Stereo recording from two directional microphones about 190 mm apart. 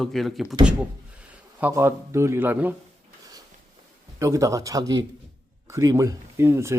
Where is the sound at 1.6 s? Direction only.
15° right (ahead or behind).